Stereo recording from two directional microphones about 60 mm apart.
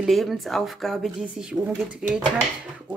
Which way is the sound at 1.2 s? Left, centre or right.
Centre.